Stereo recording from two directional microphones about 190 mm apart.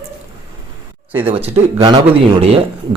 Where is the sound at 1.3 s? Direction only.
30° right (ahead or behind).